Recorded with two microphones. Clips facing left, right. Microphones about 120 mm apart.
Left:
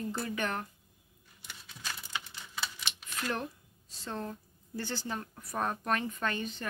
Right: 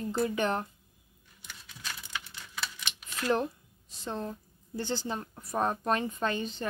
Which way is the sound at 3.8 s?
20° right (ahead or behind).